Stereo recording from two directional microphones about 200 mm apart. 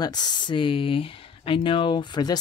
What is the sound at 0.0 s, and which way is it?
Speech, 20° left (ahead or behind).